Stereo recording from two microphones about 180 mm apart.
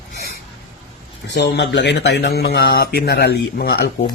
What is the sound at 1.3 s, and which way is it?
Speech, 70° left (ahead or behind).